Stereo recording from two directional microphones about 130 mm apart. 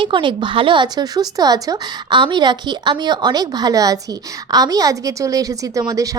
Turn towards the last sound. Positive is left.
turn(degrees=-25)  # may be behind; listen again after turning